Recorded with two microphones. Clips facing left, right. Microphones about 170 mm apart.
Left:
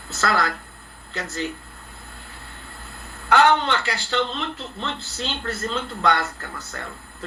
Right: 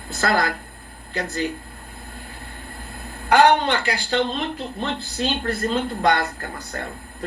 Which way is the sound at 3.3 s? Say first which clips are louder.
Right 2 dB; 35° right (ahead or behind).